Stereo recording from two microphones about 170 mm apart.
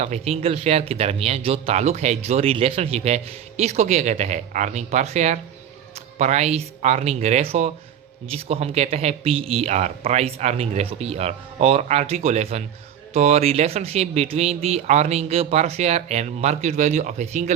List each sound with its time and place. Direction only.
0.0 s speech: 40° right (ahead or behind)